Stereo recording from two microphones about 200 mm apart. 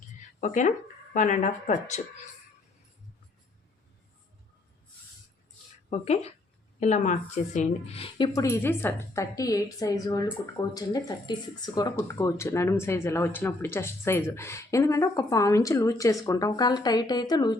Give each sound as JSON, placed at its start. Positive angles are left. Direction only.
{"t": 0.3, "sound": "speech", "side_deg": 40}
{"t": 5.9, "sound": "speech", "side_deg": 30}
{"t": 8.4, "sound": "speech", "side_deg": 15}